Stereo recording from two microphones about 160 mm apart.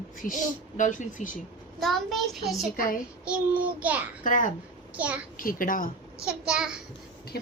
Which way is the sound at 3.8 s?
10° right (ahead or behind).